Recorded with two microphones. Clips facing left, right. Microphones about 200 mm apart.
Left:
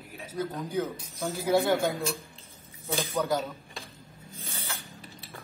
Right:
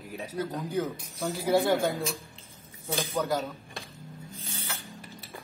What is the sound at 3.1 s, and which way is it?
Speech, centre (ahead or behind).